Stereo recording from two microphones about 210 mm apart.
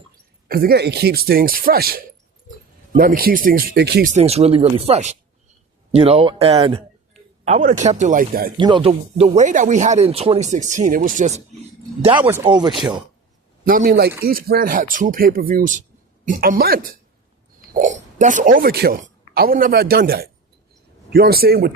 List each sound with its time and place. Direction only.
0.4 s speech: 45° right (ahead or behind)
4.1 s speech: 30° right (ahead or behind)
8.5 s speech: 20° right (ahead or behind)
12.2 s speech: 10° right (ahead or behind)
13.7 s speech: 45° right (ahead or behind)